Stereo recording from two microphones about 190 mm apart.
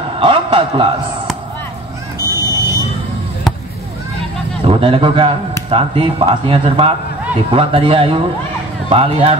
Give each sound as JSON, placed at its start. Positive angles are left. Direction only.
{"t": 0.2, "sound": "a sound", "side_deg": -25}
{"t": 2.1, "sound": "vehicle", "side_deg": 20}
{"t": 4.6, "sound": "speech", "side_deg": -30}